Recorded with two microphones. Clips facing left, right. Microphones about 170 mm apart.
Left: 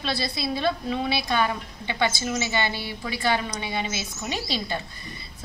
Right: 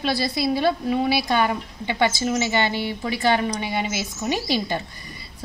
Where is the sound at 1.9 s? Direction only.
20° right (ahead or behind).